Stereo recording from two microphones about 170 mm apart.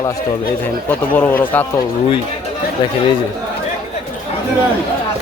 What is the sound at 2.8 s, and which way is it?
Speech, 25° left (ahead or behind).